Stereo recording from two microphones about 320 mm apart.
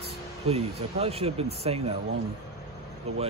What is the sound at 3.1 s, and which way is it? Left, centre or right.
Speech, centre.